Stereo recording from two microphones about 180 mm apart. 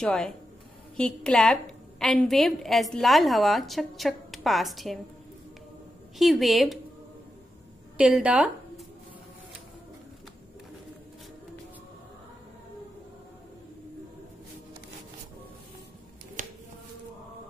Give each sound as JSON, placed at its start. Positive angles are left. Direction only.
{"t": 0.0, "sound": "a woman's voice", "side_deg": 5}
{"t": 6.1, "sound": "a woman's voice", "side_deg": 0}
{"t": 8.0, "sound": "speech", "side_deg": -5}
{"t": 16.4, "sound": "a sound", "side_deg": -50}